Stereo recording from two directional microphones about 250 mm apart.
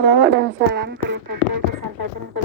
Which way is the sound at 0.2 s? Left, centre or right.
Right.